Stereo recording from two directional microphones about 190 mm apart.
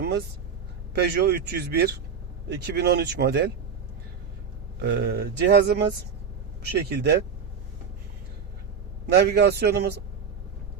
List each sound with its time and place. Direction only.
0.0 s speech: 55° right (ahead or behind)
4.8 s speech: 60° right (ahead or behind)
6.9 s speech: 60° right (ahead or behind)
9.0 s speech: 60° right (ahead or behind)